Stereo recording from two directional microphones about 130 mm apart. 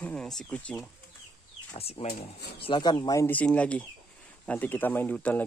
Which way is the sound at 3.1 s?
15° left (ahead or behind).